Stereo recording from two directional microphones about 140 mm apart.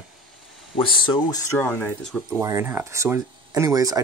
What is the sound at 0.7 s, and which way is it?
Speech, 35° left (ahead or behind).